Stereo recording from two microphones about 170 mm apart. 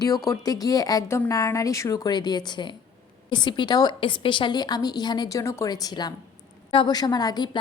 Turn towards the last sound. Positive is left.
turn(degrees=25)  # may be behind; listen again after turning